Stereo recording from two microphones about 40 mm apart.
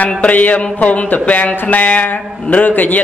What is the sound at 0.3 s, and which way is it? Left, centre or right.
Speech, left.